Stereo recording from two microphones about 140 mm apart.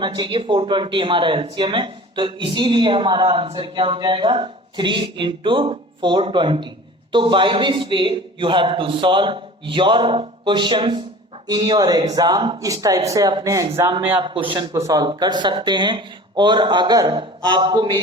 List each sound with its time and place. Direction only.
0.0 s speech: 35° right (ahead or behind)
14.1 s speech: 40° right (ahead or behind)